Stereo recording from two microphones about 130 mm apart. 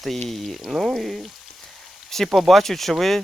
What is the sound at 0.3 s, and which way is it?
Speech, centre (ahead or behind).